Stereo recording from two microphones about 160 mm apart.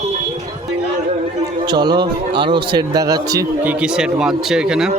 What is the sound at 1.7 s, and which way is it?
Speech, 25° right (ahead or behind).